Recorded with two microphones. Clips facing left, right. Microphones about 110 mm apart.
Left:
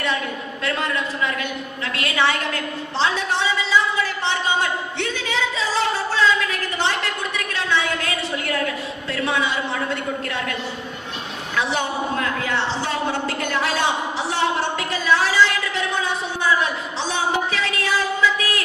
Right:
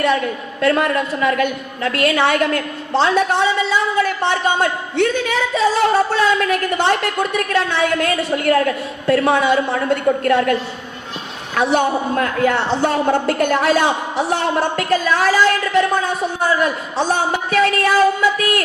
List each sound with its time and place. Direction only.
0.6 s a woman's voice: 50° right (ahead or behind)